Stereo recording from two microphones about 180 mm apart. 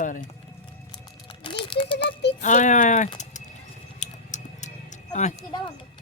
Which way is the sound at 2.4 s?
45° left (ahead or behind).